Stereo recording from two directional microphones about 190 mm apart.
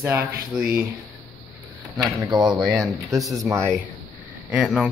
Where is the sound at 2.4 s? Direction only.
Centre (ahead or behind).